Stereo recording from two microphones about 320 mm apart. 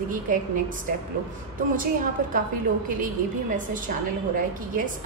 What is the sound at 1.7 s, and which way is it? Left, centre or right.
A woman's voice, right.